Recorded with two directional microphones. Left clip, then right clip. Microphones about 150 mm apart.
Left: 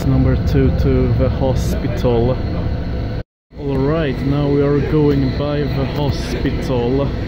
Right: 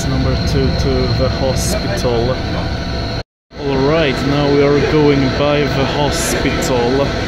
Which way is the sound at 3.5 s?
15° right (ahead or behind).